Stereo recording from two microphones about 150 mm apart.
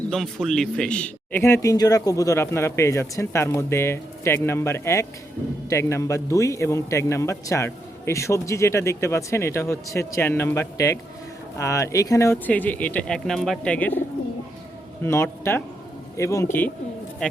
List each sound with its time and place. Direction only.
0.1 s a man's voice: centre (ahead or behind)
15.0 s a man's voice: 15° left (ahead or behind)